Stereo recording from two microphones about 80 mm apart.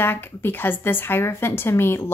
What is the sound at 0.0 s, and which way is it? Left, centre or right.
A woman's voice, left.